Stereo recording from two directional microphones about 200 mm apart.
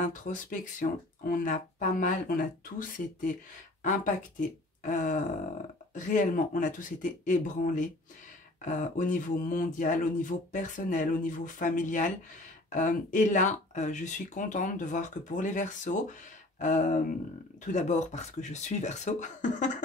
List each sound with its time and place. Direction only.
0.0 s speech: 40° left (ahead or behind)